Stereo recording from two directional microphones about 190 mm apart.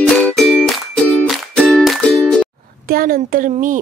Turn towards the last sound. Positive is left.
turn(degrees=-45)  # may be behind; listen again after turning